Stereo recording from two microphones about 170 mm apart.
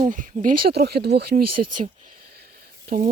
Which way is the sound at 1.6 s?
45° right (ahead or behind).